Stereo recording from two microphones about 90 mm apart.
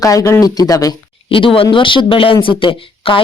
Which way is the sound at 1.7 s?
70° left (ahead or behind).